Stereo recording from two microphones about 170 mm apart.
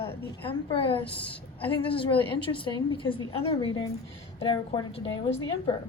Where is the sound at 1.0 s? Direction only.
10° left (ahead or behind).